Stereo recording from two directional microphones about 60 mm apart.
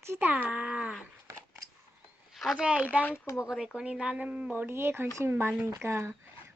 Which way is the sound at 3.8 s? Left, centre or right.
Centre.